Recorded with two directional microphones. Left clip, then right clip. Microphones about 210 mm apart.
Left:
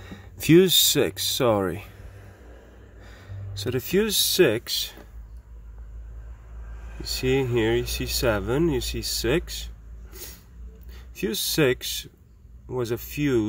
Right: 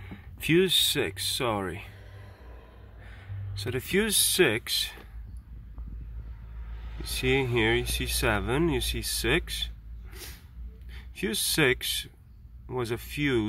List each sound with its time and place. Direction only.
0.0 s speech: 30° left (ahead or behind)
3.0 s speech: 25° left (ahead or behind); by 4.9 s 10° left (ahead or behind)
7.1 s speech: 10° left (ahead or behind)
10.9 s speech: 10° left (ahead or behind)